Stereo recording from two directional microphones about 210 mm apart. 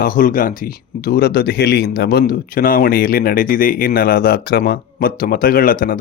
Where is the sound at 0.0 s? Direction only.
40° left (ahead or behind).